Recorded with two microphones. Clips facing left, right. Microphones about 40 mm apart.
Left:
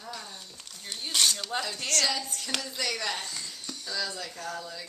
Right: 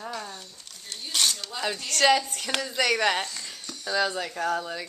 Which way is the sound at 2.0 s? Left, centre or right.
Right.